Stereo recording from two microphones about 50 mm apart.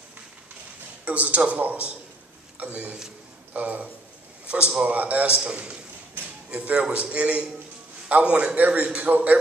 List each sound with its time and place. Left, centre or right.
1.0 s a man's voice: right
4.5 s a man's voice: centre
4.8 s a man's voice: right
8.5 s a man's voice: right